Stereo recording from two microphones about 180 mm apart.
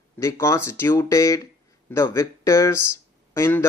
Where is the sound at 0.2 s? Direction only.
15° left (ahead or behind).